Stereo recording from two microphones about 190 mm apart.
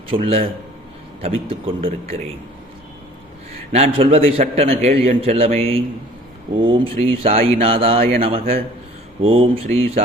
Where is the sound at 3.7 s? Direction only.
30° right (ahead or behind).